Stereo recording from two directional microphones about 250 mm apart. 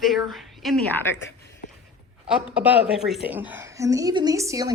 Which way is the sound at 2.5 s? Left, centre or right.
Centre.